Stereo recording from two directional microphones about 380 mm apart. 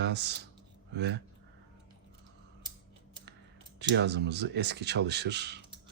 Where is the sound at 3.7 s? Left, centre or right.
Right.